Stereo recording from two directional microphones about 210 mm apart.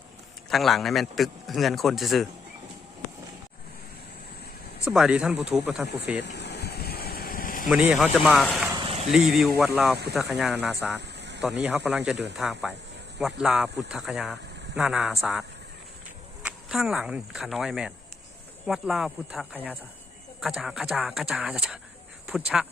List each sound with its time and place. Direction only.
0.5 s a man's voice: centre (ahead or behind)
4.9 s a man's voice: 5° right (ahead or behind)
6.2 s vehicle: 55° left (ahead or behind)
7.7 s a man's voice: 5° right (ahead or behind)
8.7 s a sound: 25° right (ahead or behind)
9.0 s a man's voice: centre (ahead or behind)
11.0 s a sound: 55° right (ahead or behind)
11.4 s a man's voice: 5° right (ahead or behind)